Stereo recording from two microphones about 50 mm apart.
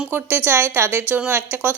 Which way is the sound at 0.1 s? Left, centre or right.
Right.